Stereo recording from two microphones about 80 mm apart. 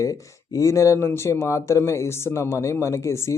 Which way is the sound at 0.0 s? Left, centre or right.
Left.